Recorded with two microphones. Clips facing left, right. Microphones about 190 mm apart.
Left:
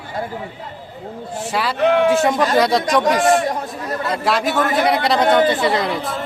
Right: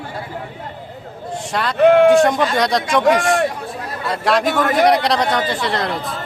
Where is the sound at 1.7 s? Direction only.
55° right (ahead or behind).